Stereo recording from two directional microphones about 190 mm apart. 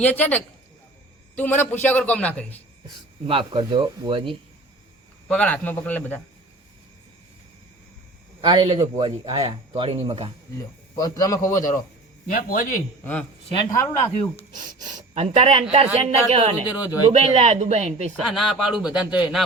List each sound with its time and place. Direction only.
0.0 s a man's voice: 10° left (ahead or behind)
2.8 s speech: 30° right (ahead or behind)
5.3 s a man's voice: 5° left (ahead or behind)
8.4 s speech: 25° right (ahead or behind)
10.6 s a man's voice: 20° left (ahead or behind)
12.3 s a man's voice: 50° left (ahead or behind)
13.5 s a man's voice: 15° left (ahead or behind)
14.5 s speech: 40° right (ahead or behind)
16.6 s speech: 10° right (ahead or behind)
17.1 s speech: 35° right (ahead or behind)
18.2 s speech: centre (ahead or behind)